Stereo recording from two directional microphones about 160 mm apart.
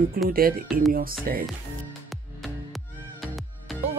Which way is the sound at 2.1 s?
Centre (ahead or behind).